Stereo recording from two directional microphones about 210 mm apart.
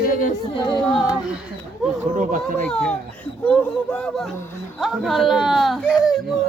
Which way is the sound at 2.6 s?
5° left (ahead or behind).